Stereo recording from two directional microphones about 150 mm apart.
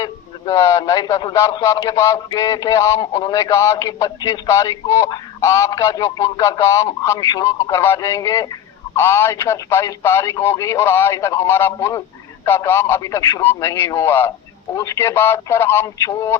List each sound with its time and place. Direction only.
0.0 s a man's voice: 25° left (ahead or behind)